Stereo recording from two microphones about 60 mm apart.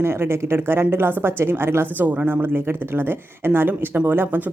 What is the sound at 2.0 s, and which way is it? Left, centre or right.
Speech, right.